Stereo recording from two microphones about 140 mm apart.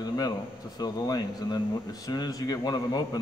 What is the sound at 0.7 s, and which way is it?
Speech, 30° left (ahead or behind).